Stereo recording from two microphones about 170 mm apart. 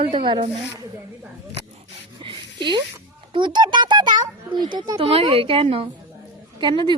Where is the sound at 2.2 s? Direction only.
30° right (ahead or behind).